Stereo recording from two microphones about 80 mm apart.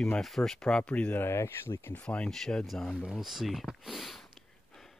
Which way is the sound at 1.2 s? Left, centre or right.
Left.